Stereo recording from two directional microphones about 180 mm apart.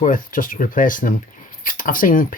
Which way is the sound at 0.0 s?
50° left (ahead or behind).